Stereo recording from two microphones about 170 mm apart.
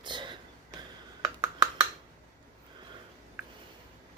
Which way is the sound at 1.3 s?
20° right (ahead or behind).